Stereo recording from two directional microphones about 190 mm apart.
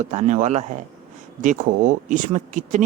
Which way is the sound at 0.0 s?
40° right (ahead or behind).